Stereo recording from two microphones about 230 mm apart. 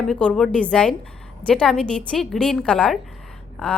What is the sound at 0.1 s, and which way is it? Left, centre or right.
A woman's voice, centre.